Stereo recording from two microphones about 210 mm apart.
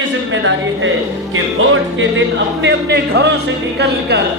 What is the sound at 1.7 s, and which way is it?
Speech, 60° right (ahead or behind).